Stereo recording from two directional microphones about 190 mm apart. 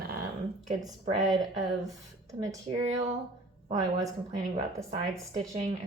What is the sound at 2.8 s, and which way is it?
Speech, 35° right (ahead or behind).